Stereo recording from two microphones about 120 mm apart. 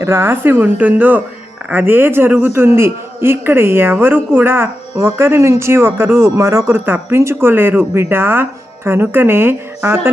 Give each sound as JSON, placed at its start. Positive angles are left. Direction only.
{"t": 0.0, "sound": "a woman's voice", "side_deg": -20}